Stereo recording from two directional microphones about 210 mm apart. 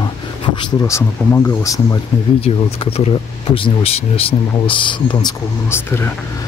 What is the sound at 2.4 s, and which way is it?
Speech, 25° left (ahead or behind).